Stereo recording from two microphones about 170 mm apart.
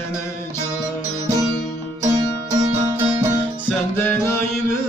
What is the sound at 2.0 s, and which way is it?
Music, 20° right (ahead or behind).